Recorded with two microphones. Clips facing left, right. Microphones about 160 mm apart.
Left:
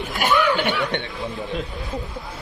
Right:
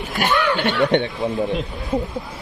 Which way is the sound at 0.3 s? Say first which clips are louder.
Left 1 dB; 10° left (ahead or behind).